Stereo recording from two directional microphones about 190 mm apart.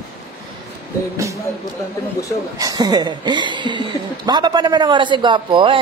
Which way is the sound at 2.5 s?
20° right (ahead or behind).